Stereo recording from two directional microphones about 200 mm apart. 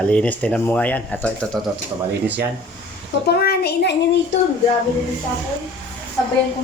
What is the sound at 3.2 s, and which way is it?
Speech, 50° left (ahead or behind).